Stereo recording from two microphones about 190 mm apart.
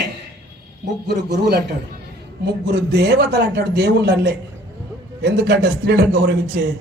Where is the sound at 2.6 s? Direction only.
65° right (ahead or behind).